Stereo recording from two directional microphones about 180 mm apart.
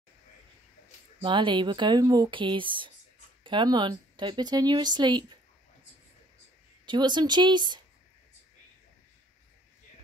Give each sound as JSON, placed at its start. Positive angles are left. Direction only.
{"t": 1.2, "sound": "speech", "side_deg": -25}
{"t": 6.9, "sound": "speech", "side_deg": -25}